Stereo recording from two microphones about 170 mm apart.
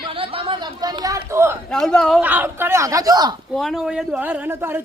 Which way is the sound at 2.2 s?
10° right (ahead or behind).